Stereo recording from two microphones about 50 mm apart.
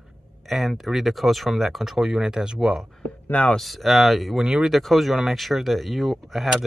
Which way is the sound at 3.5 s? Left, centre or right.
Centre.